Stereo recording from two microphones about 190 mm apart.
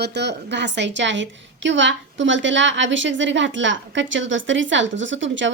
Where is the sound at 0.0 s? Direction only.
65° right (ahead or behind).